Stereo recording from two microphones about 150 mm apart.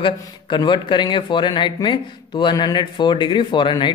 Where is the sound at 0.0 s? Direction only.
30° left (ahead or behind).